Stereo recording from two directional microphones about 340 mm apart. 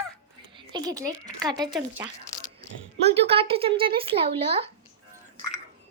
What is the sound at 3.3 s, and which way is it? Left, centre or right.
Speech, centre.